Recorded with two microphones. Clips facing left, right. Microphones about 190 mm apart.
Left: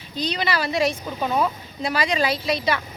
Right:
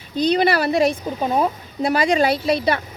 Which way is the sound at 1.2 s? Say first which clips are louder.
Right 2 dB; 45° right (ahead or behind).